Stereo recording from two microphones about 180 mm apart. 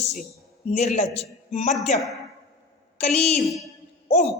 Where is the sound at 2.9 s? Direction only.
35° left (ahead or behind).